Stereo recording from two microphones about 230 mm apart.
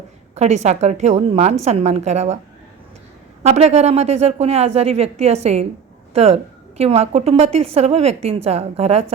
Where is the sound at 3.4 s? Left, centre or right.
Right.